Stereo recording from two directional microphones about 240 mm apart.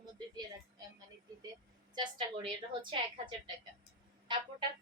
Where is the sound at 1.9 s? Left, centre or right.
Centre.